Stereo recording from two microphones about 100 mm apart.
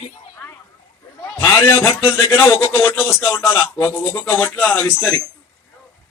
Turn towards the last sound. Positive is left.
turn(degrees=10)  # may be behind; listen again after turning